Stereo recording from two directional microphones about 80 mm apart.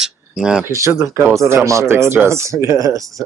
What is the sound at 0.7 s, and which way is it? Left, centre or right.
Speech, right.